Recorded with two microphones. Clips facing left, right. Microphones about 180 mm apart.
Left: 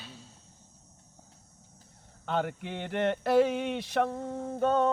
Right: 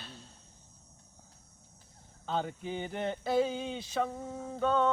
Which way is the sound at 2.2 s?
70° left (ahead or behind).